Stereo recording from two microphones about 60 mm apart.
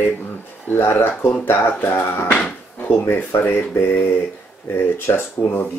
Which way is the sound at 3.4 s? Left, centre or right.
Left.